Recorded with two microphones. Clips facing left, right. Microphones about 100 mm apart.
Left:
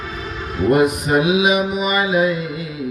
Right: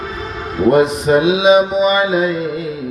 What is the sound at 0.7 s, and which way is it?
Mantra, 25° right (ahead or behind).